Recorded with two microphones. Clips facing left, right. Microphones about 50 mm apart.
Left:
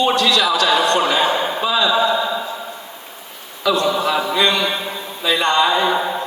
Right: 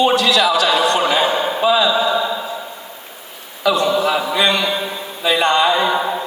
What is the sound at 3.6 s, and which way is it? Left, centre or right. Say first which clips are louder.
A man's voice: right 2 dB; centre.